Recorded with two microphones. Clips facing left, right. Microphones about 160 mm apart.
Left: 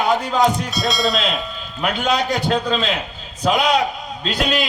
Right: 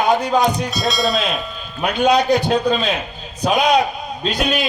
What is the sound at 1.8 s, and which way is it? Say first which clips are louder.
Speech: right 4 dB; 20° right (ahead or behind).